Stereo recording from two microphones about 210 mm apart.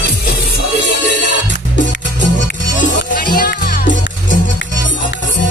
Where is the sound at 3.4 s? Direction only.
45° left (ahead or behind).